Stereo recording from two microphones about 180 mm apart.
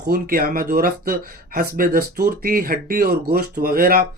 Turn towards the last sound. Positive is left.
turn(degrees=-55)  # may be behind; listen again after turning